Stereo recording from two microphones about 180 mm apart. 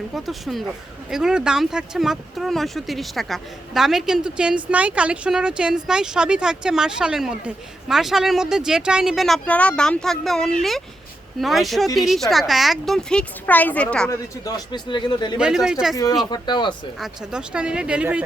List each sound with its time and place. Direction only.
0.2 s speech: centre (ahead or behind)
14.1 s speech: 20° left (ahead or behind)
15.4 s speech: 5° right (ahead or behind)
16.3 s speech: 25° left (ahead or behind)
17.0 s speech: 5° right (ahead or behind)